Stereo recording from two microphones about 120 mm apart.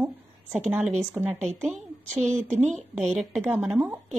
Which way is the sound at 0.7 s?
10° right (ahead or behind).